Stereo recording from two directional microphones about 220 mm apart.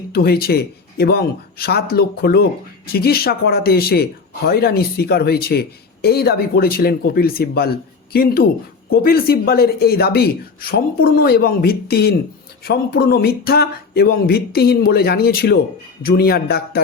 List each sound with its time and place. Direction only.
0.1 s speech: 45° left (ahead or behind)